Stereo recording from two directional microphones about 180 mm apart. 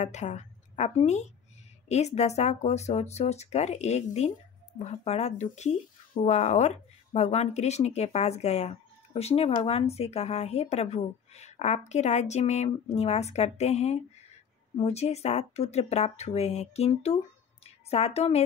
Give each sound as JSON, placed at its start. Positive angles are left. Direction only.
{"t": 0.0, "sound": "a woman's voice", "side_deg": 40}